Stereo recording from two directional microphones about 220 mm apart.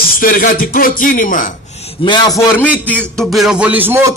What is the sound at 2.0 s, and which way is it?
Speech, 20° left (ahead or behind).